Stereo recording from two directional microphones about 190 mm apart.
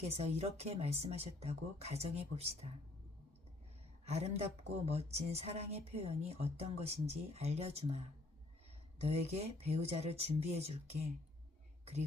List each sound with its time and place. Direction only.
0.0 s a woman's voice: 35° right (ahead or behind)
4.0 s a woman's voice: 35° right (ahead or behind)